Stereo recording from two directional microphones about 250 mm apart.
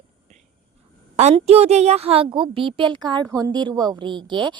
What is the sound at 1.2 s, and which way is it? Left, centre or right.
A woman's voice, right.